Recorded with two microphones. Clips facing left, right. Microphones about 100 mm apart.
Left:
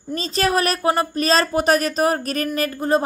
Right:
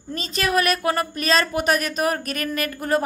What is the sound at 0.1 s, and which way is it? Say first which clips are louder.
A woman's voice: left 3 dB; 35° left (ahead or behind).